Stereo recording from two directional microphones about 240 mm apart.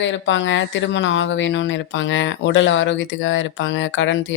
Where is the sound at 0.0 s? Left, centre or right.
Left.